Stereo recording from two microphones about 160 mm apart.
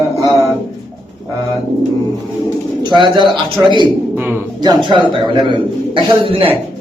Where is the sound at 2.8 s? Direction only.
30° right (ahead or behind).